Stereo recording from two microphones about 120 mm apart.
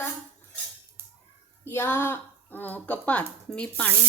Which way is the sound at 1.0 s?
20° right (ahead or behind).